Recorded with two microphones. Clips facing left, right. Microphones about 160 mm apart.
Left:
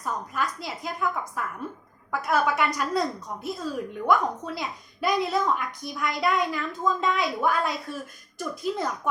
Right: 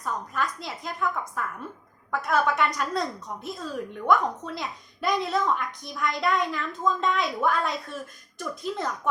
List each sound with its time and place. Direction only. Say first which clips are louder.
0.0 s a woman's voice: even; 5° left (ahead or behind)